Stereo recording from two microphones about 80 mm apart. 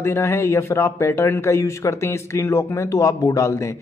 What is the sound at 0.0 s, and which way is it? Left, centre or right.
Speech, left.